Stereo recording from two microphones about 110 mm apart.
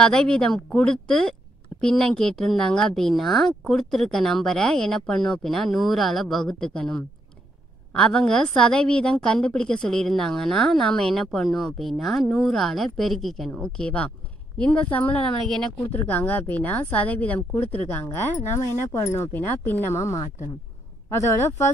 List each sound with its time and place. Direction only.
0.0 s a woman's voice: 5° left (ahead or behind)
18.9 s speech: 30° left (ahead or behind)